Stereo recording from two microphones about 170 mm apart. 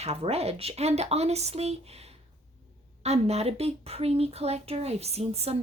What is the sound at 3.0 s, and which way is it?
Speech, 40° right (ahead or behind).